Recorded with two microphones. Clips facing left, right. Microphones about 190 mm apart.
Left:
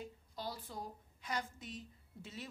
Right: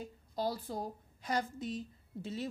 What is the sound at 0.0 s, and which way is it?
A woman's voice, 40° right (ahead or behind).